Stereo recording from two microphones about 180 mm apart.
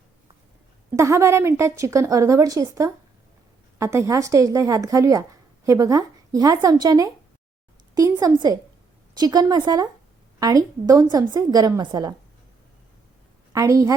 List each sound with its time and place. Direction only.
0.9 s a woman's voice: 15° right (ahead or behind)
8.2 s a woman's voice: 20° right (ahead or behind)
13.5 s a woman's voice: 20° right (ahead or behind)